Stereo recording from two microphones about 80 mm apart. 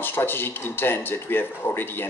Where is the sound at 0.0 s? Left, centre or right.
Left.